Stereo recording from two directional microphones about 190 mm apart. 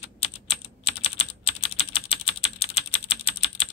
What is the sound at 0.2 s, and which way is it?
Typing, 30° left (ahead or behind).